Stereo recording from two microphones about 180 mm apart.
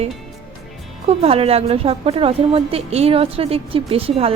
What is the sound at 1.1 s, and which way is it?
A woman's voice, 35° right (ahead or behind).